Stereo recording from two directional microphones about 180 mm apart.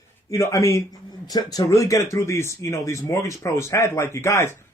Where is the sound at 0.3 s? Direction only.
15° left (ahead or behind).